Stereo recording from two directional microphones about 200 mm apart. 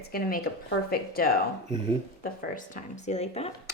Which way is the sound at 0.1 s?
45° left (ahead or behind).